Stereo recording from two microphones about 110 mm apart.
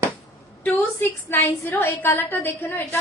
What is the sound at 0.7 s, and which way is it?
A woman's voice, 20° left (ahead or behind).